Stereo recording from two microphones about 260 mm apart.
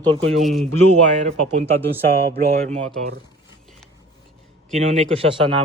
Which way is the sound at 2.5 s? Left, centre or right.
Right.